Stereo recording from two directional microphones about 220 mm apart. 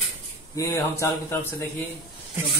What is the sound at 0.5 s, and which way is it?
Speech, 15° left (ahead or behind).